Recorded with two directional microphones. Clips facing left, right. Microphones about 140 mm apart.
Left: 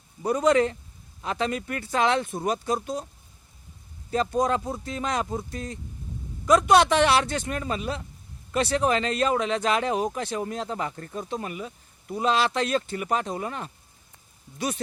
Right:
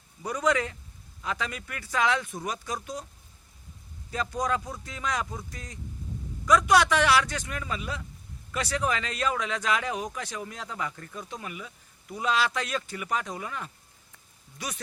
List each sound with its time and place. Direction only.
0.2 s speech: 30° left (ahead or behind)
4.1 s speech: 30° left (ahead or behind)